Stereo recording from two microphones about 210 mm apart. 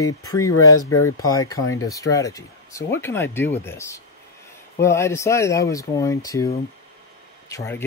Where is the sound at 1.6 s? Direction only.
75° left (ahead or behind).